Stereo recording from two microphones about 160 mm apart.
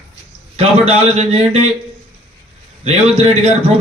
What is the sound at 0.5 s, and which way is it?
Speech, 40° right (ahead or behind).